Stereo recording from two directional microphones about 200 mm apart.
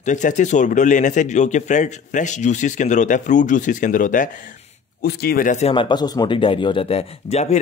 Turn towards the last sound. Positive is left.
turn(degrees=35)  # may be behind; listen again after turning